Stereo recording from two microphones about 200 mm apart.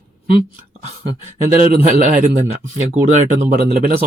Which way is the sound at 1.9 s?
40° right (ahead or behind).